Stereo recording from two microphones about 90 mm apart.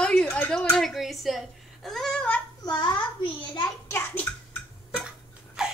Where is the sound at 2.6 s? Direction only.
55° left (ahead or behind).